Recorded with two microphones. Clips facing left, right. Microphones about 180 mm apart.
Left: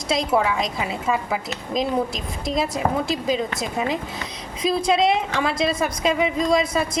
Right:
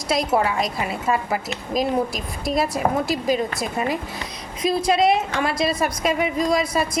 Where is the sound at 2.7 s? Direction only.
20° left (ahead or behind).